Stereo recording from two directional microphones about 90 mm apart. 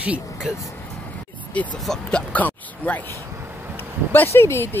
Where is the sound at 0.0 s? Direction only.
10° right (ahead or behind).